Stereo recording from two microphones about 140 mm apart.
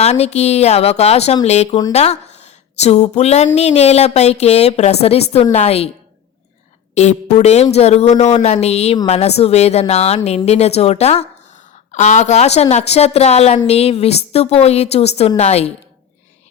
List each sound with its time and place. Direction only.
0.0 s speech: 50° left (ahead or behind)
6.9 s speech: 55° left (ahead or behind)